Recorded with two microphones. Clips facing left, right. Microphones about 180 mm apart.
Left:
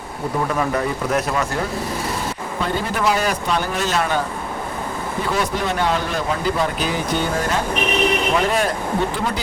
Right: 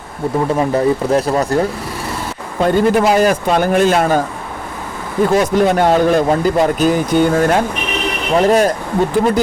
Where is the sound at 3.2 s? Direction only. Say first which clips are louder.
Right 8 dB; 45° right (ahead or behind).